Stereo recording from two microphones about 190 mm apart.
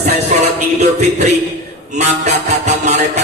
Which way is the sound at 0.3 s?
40° right (ahead or behind).